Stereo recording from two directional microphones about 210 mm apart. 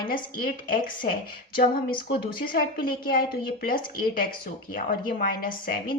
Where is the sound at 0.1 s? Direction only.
45° left (ahead or behind).